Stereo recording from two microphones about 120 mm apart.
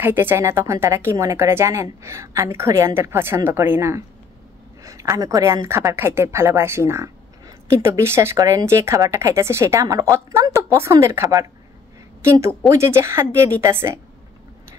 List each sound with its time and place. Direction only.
0.0 s a woman's voice: 20° right (ahead or behind)